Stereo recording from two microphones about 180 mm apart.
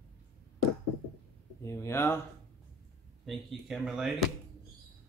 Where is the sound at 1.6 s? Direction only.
15° left (ahead or behind).